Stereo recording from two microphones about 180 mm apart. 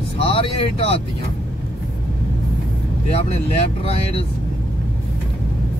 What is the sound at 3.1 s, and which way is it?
Speech, 35° left (ahead or behind).